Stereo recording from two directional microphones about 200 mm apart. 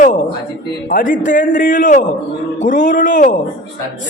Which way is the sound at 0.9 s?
40° left (ahead or behind).